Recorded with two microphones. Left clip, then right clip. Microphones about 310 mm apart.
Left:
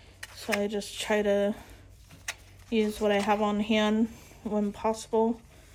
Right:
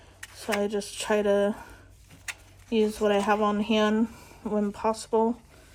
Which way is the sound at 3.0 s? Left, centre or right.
Right.